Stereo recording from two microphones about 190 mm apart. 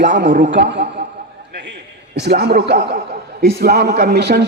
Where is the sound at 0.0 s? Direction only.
70° right (ahead or behind).